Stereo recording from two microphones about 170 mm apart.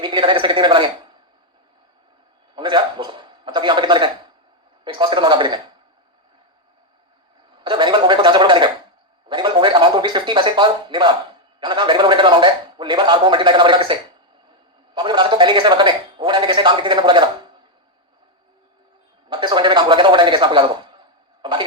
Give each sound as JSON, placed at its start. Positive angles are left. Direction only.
{"t": 0.0, "sound": "speech", "side_deg": -25}
{"t": 2.6, "sound": "a sound", "side_deg": -30}
{"t": 4.9, "sound": "speech", "side_deg": -25}
{"t": 7.6, "sound": "speech", "side_deg": -25}
{"t": 9.3, "sound": "a sound", "side_deg": -30}
{"t": 11.6, "sound": "speech", "side_deg": -25}
{"t": 19.3, "sound": "speech", "side_deg": -25}